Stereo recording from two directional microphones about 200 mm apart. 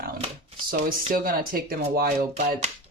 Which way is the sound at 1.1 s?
45° right (ahead or behind).